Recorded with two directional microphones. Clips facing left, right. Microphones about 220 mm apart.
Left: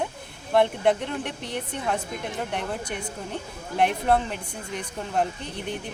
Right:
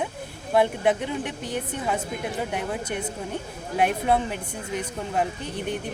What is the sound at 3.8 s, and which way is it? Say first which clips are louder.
Speech: even; centre (ahead or behind).